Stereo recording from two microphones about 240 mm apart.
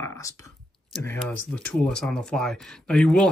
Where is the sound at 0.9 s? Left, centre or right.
Centre.